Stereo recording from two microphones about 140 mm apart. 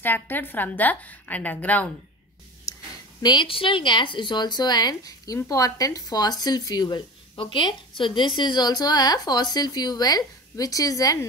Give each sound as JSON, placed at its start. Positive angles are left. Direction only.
{"t": 0.0, "sound": "a woman's voice", "side_deg": 15}
{"t": 3.2, "sound": "speech", "side_deg": 30}